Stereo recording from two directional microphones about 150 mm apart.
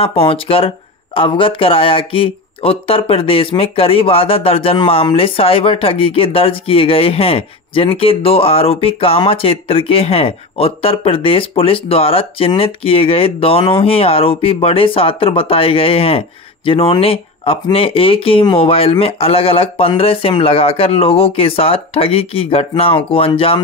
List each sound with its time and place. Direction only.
0.0 s speech: 40° left (ahead or behind)